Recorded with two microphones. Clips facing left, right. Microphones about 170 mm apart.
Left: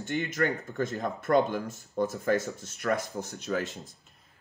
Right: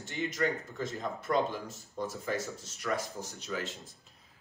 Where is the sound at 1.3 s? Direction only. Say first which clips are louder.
Left 6 dB; 60° left (ahead or behind).